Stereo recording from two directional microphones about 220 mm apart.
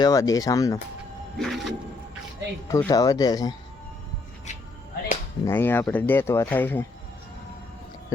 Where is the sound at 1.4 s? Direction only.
Centre (ahead or behind).